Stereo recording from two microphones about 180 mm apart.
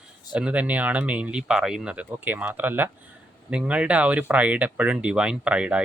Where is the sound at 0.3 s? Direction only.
5° right (ahead or behind).